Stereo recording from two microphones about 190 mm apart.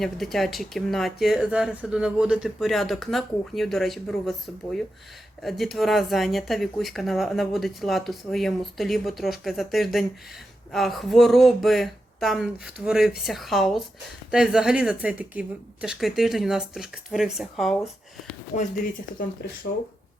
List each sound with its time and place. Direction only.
0.0 s speech: centre (ahead or behind)
19.4 s speech: 60° left (ahead or behind)